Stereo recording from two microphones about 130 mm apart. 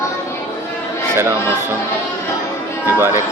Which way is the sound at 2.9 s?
20° right (ahead or behind).